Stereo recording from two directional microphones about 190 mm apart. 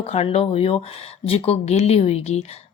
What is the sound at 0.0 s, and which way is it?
Speech, 35° left (ahead or behind).